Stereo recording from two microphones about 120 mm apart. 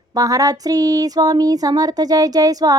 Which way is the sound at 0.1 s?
30° right (ahead or behind).